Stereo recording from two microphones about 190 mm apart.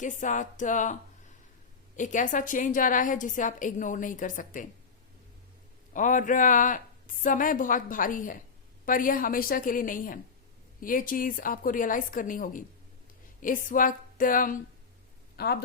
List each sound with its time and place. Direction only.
0.0 s a sound: 40° left (ahead or behind)
2.0 s a woman's voice: 40° left (ahead or behind)
5.9 s a woman's voice: 45° left (ahead or behind)